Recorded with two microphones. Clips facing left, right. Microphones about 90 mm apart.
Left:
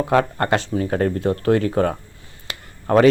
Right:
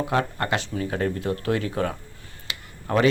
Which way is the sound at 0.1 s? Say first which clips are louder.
Left 9 dB; 45° left (ahead or behind).